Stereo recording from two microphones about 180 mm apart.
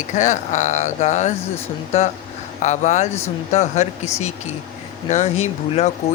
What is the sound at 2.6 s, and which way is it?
Speech, 40° left (ahead or behind).